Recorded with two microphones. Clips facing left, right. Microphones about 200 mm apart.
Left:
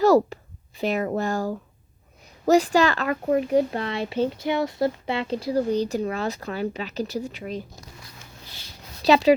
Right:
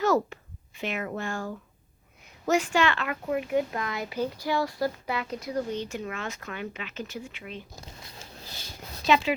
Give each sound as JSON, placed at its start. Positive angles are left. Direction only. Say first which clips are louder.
{"t": 0.0, "sound": "a sound", "louder": "left 7 dB", "side_deg": 35}
{"t": 0.8, "sound": "speech", "louder": "left 8 dB", "side_deg": 35}
{"t": 9.0, "sound": "speech", "louder": "left 7 dB", "side_deg": 35}